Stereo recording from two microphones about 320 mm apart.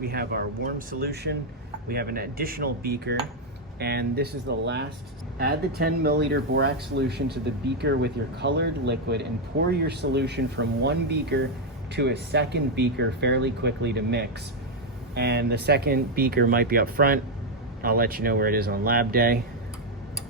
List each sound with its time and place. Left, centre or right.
0.0 s speech: right